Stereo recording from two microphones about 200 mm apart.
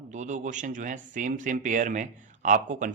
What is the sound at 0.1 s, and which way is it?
Speech, 35° right (ahead or behind).